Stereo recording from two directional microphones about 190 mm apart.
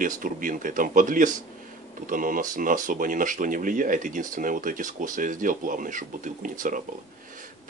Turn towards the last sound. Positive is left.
turn(degrees=-45)  # may be behind; listen again after turning